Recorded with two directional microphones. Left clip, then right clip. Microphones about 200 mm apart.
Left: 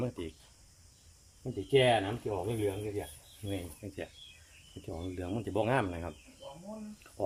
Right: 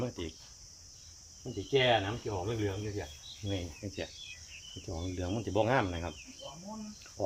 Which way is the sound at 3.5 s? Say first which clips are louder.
Right 1 dB; centre (ahead or behind).